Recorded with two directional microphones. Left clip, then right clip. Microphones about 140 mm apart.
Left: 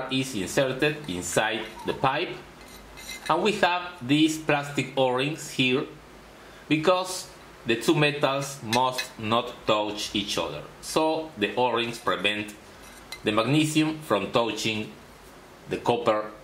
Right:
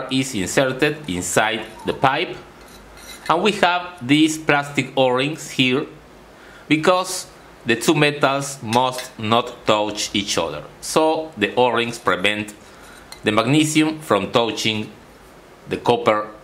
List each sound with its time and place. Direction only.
0.1 s speech: 35° right (ahead or behind)
3.3 s speech: 35° right (ahead or behind)